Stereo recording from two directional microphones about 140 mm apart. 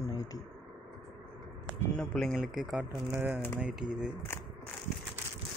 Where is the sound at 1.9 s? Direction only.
10° left (ahead or behind).